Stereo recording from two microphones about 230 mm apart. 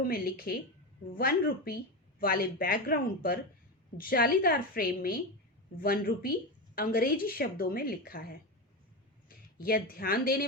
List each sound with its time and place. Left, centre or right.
0.0 s a woman's voice: left
9.6 s a woman's voice: left